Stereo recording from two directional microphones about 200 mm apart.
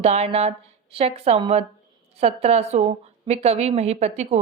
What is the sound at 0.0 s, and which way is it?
A woman's voice, 30° right (ahead or behind).